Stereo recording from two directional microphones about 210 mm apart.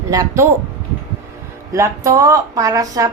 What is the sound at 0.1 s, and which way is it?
Speech, 15° right (ahead or behind).